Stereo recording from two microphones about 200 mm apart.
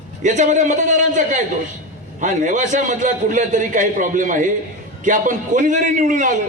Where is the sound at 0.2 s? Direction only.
40° right (ahead or behind).